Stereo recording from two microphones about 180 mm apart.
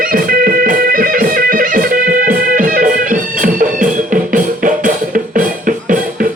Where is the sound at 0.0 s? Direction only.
50° right (ahead or behind).